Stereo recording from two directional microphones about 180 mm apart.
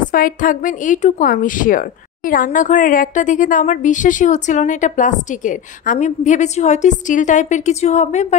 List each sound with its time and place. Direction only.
0.1 s speech: 50° left (ahead or behind)